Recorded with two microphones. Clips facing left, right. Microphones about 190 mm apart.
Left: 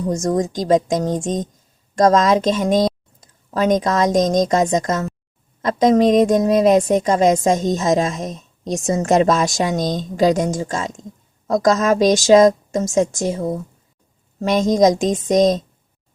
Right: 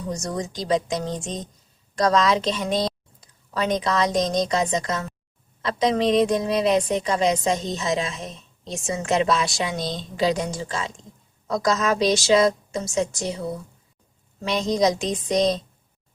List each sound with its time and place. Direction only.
0.0 s a woman's voice: 45° left (ahead or behind)